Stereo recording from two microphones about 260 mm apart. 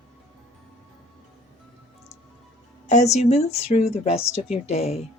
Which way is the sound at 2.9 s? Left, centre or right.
Left.